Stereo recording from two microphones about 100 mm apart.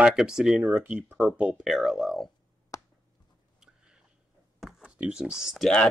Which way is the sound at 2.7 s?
30° left (ahead or behind).